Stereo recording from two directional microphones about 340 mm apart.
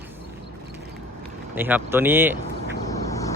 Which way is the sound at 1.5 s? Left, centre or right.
Centre.